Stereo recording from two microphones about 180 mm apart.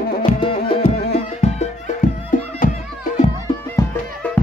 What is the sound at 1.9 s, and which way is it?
Music, 45° left (ahead or behind).